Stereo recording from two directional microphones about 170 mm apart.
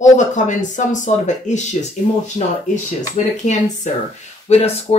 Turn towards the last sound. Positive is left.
turn(degrees=35)  # may be behind; listen again after turning